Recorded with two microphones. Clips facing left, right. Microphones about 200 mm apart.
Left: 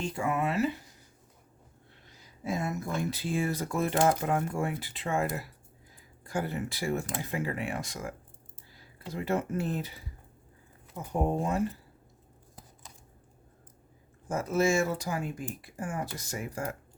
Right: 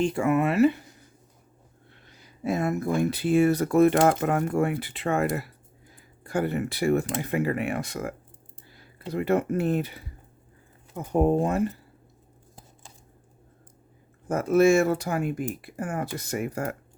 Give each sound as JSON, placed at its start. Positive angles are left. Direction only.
{"t": 0.0, "sound": "speech", "side_deg": -65}
{"t": 2.0, "sound": "speech", "side_deg": -65}
{"t": 14.3, "sound": "speech", "side_deg": -60}